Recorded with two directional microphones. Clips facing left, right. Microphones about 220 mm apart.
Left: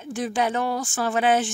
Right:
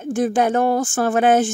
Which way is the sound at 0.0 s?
50° right (ahead or behind).